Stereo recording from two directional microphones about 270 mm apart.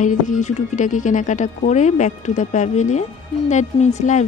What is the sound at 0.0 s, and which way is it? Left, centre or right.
A woman's voice, left.